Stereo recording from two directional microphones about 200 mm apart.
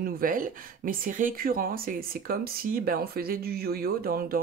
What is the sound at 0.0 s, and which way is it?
Speech, 45° right (ahead or behind).